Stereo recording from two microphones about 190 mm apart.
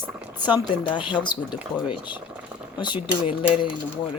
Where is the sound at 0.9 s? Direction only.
25° left (ahead or behind).